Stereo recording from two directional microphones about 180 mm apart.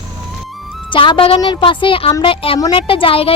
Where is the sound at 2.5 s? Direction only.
20° left (ahead or behind).